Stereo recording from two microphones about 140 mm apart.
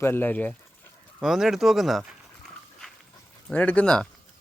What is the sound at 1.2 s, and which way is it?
Speech, centre (ahead or behind).